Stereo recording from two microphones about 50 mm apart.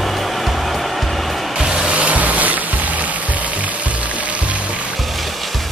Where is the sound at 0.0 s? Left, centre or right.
Centre.